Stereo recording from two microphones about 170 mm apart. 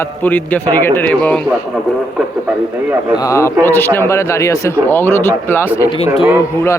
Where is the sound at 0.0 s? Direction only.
10° left (ahead or behind).